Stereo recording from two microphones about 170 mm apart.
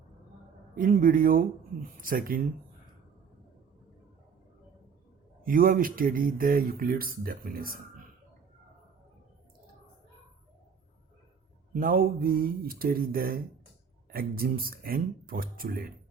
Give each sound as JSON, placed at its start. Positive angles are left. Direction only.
{"t": 0.8, "sound": "speech", "side_deg": -55}
{"t": 5.4, "sound": "speech", "side_deg": -55}
{"t": 11.7, "sound": "speech", "side_deg": -55}